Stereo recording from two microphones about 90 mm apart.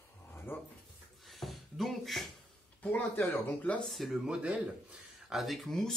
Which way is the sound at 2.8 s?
20° left (ahead or behind).